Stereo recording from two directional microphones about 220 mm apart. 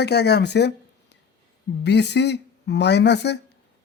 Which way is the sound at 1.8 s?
50° left (ahead or behind).